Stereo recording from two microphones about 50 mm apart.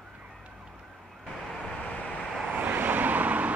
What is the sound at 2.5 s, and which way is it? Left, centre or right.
Vehicle, right.